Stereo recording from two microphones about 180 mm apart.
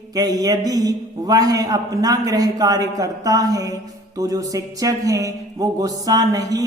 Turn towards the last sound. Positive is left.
turn(degrees=-20)  # may be behind; listen again after turning